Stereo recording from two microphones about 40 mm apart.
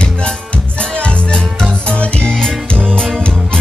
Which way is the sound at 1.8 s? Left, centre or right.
Left.